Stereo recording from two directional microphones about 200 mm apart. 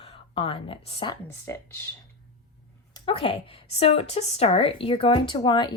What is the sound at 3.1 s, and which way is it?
Speech, 25° left (ahead or behind).